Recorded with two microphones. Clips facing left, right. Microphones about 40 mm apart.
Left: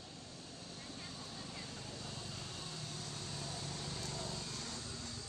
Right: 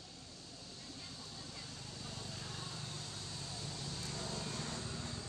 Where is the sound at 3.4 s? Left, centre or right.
Centre.